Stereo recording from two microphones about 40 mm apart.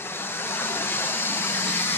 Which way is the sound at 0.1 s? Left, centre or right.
Left.